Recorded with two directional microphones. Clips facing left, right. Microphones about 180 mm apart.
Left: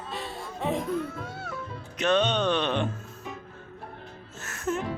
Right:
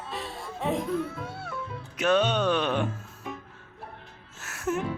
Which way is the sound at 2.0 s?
5° right (ahead or behind).